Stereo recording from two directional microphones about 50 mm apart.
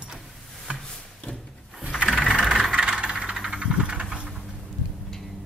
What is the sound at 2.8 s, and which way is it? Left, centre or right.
Vehicle, centre.